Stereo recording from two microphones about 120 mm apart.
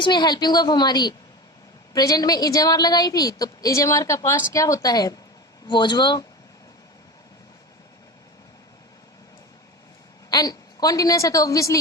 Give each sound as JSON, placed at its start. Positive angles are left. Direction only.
{"t": 0.0, "sound": "a woman's voice", "side_deg": 40}
{"t": 10.2, "sound": "a woman's voice", "side_deg": 35}